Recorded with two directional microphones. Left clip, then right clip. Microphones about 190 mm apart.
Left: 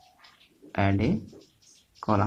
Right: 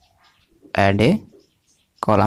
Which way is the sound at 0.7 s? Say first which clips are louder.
Right 10 dB; 50° right (ahead or behind).